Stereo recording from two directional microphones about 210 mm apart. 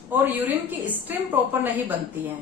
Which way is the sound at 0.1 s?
10° right (ahead or behind).